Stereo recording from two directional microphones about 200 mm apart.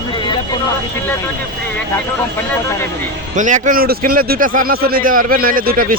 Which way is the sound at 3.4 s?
40° right (ahead or behind).